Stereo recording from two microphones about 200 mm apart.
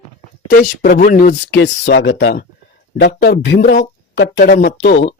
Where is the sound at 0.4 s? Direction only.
40° left (ahead or behind); by 3.6 s 60° left (ahead or behind).